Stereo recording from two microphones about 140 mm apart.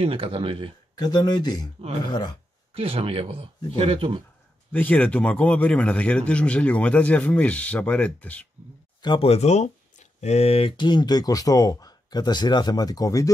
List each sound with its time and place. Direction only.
0.0 s speech: 40° right (ahead or behind)
0.9 s speech: 30° left (ahead or behind)
2.7 s speech: 45° right (ahead or behind)
4.7 s a man's voice: 10° left (ahead or behind)
9.0 s speech: 40° left (ahead or behind); by 13.3 s 25° left (ahead or behind)